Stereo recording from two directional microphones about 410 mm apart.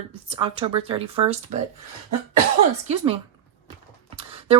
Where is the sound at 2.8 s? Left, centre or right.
Centre.